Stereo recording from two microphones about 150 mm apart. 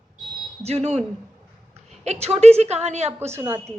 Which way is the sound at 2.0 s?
45° right (ahead or behind).